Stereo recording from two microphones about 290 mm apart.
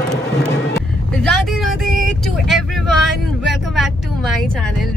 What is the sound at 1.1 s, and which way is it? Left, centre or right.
Vehicle, centre.